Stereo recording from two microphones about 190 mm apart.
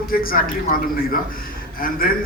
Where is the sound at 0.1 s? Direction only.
50° left (ahead or behind).